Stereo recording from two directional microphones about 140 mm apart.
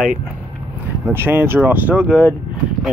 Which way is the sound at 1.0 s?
15° right (ahead or behind).